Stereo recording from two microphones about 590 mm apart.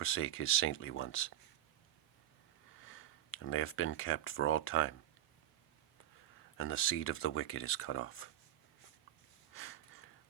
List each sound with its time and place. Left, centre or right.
0.0 s speech: centre
2.7 s speech: left
6.6 s speech: centre
9.5 s a sound: left